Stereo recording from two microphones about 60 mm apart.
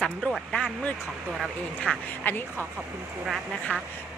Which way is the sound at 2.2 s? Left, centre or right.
Left.